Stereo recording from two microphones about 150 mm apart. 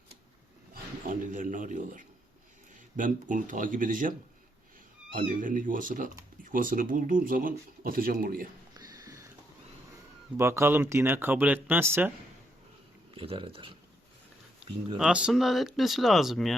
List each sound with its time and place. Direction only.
0.7 s speech: 65° right (ahead or behind)
5.1 s speech: 65° right (ahead or behind)
8.7 s a sound: 25° right (ahead or behind)
10.3 s speech: 15° right (ahead or behind)
13.1 s speech: 35° right (ahead or behind)
14.6 s a sound: 10° right (ahead or behind)
14.9 s speech: 5° right (ahead or behind)